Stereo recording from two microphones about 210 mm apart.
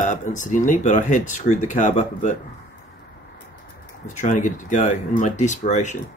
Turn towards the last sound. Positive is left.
turn(degrees=35)  # may be behind; listen again after turning